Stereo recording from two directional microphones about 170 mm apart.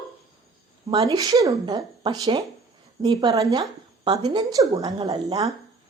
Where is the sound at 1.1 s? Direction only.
20° right (ahead or behind).